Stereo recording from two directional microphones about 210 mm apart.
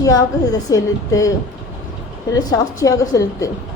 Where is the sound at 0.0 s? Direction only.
15° left (ahead or behind).